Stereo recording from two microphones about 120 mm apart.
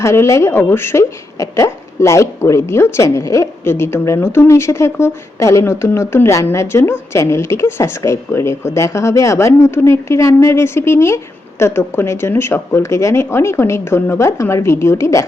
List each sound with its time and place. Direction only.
0.0 s a woman's voice: 25° left (ahead or behind)